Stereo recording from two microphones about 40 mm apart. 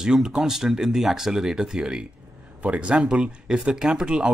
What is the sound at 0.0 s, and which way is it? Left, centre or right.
Speech, centre.